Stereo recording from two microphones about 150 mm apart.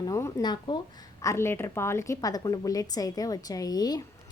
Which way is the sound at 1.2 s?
20° left (ahead or behind).